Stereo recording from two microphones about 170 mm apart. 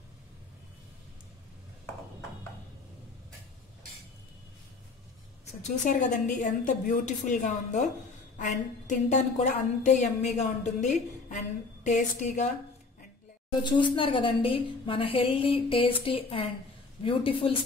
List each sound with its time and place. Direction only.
5.6 s a woman's voice: 45° left (ahead or behind)
13.6 s a woman's voice: 25° left (ahead or behind)